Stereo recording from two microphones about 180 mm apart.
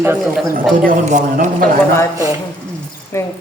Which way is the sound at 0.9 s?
45° right (ahead or behind).